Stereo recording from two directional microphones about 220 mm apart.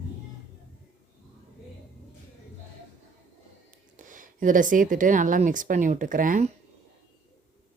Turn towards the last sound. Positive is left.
turn(degrees=-35)  # may be behind; listen again after turning